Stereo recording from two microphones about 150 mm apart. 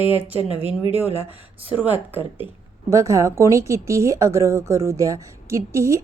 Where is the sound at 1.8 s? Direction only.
10° right (ahead or behind).